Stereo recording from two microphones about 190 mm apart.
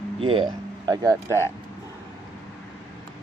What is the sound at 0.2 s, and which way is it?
Speech, 25° right (ahead or behind).